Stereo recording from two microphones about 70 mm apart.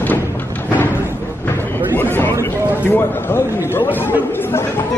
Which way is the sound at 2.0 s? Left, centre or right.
Left.